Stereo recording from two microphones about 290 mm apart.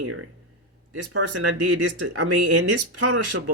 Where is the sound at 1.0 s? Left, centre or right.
Right.